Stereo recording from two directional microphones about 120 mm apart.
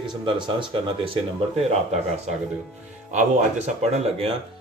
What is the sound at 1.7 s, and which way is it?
A man's voice, 70° right (ahead or behind).